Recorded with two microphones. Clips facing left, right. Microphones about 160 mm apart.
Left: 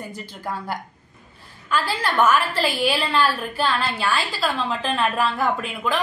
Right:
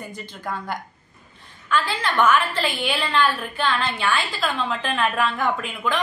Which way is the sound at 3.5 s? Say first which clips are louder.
Left 1 dB; 5° left (ahead or behind).